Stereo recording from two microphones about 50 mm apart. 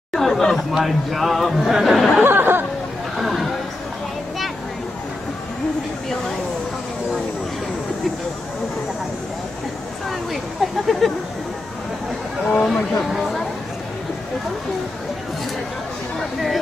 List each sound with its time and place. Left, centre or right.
0.1 s speech: centre
0.7 s a man's voice: centre
2.2 s speech: right
3.2 s a sound: centre
10.0 s a sound: centre
12.4 s speech: centre
13.1 s a man's voice: centre
16.2 s a man's voice: centre